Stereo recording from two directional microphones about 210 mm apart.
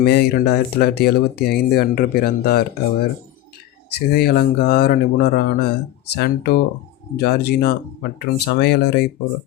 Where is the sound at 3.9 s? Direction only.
50° left (ahead or behind).